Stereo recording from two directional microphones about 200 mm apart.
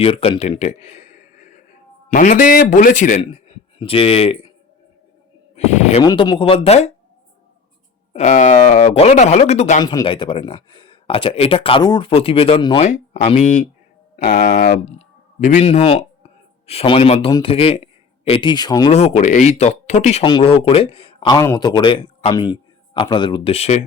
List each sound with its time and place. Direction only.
0.0 s speech: 30° left (ahead or behind)
5.5 s a sound: 35° left (ahead or behind)
6.0 s speech: 20° left (ahead or behind)
8.1 s speech: 35° left (ahead or behind)
9.8 s speech: 25° left (ahead or behind)
18.9 s speech: 35° left (ahead or behind)